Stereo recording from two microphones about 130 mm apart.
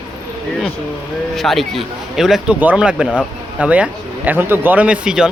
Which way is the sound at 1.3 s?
Centre (ahead or behind).